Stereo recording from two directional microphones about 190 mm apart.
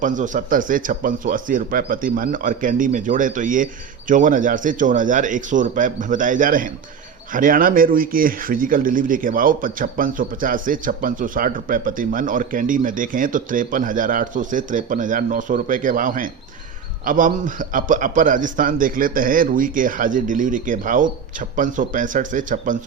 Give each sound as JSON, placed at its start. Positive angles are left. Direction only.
{"t": 0.0, "sound": "speech", "side_deg": -40}